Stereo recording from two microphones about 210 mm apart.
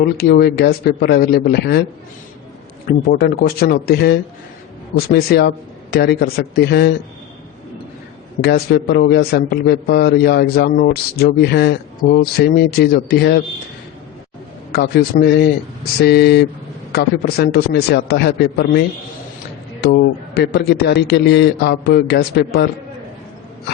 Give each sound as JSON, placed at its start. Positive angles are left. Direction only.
{"t": 0.0, "sound": "a man's voice", "side_deg": 50}
{"t": 2.8, "sound": "a man's voice", "side_deg": 45}
{"t": 8.4, "sound": "a man's voice", "side_deg": 50}
{"t": 14.7, "sound": "a man's voice", "side_deg": 45}